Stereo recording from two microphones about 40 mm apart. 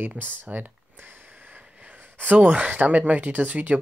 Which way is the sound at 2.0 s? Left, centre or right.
Right.